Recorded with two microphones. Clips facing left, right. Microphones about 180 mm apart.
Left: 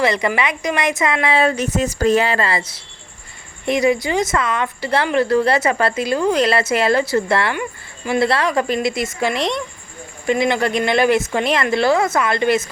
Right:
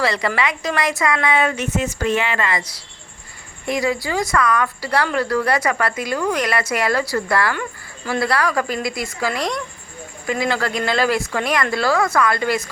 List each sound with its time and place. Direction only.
0.0 s a woman's voice: 20° left (ahead or behind)